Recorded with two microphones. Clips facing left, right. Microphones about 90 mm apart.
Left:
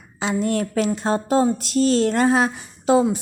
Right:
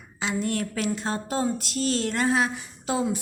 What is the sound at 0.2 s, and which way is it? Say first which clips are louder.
A woman's voice: left 6 dB; 30° left (ahead or behind).